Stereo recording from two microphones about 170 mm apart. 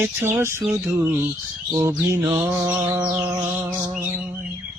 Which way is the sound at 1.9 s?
15° right (ahead or behind).